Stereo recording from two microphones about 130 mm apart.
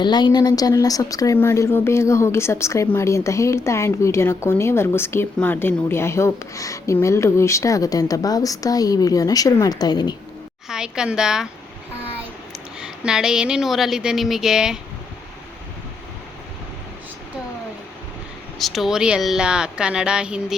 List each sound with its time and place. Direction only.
0.0 s a woman's voice: 35° left (ahead or behind)
10.7 s speech: 5° right (ahead or behind)
12.8 s speech: 5° right (ahead or behind)
18.6 s a woman's voice: centre (ahead or behind)